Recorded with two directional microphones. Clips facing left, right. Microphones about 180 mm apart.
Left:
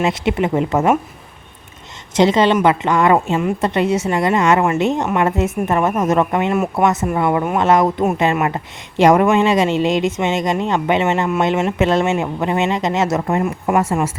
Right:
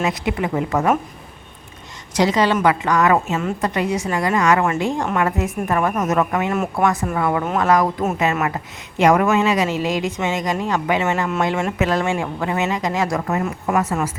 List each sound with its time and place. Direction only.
0.0 s speech: 25° left (ahead or behind)
2.1 s speech: 25° left (ahead or behind)